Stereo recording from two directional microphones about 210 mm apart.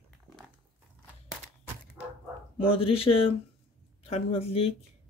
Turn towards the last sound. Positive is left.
turn(degrees=25)  # may be behind; listen again after turning